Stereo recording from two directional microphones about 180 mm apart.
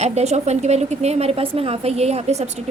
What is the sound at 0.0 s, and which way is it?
Speech, 35° right (ahead or behind).